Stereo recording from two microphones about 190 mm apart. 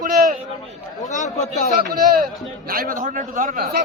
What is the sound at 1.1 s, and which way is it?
Speech, 40° left (ahead or behind).